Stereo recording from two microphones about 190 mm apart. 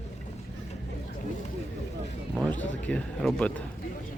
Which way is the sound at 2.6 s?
5° left (ahead or behind).